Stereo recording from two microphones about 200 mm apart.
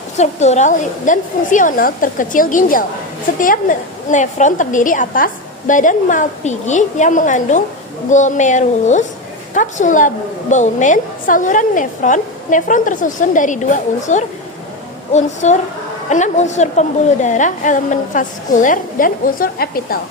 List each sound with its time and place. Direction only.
0.2 s a woman's voice: 35° left (ahead or behind)